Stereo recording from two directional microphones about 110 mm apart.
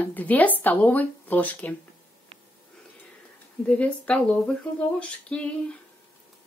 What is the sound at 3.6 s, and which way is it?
Speech, 10° left (ahead or behind).